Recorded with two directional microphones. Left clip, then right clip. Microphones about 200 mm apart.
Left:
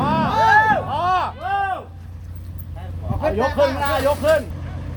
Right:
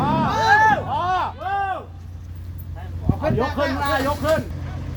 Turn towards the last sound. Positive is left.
turn(degrees=55)  # may be behind; listen again after turning